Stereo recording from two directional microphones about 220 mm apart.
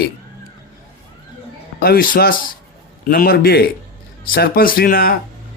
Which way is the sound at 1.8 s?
40° left (ahead or behind).